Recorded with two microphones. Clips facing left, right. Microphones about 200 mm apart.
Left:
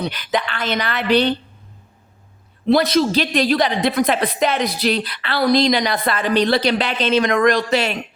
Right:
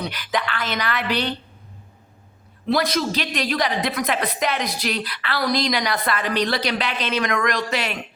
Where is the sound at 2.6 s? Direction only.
25° left (ahead or behind).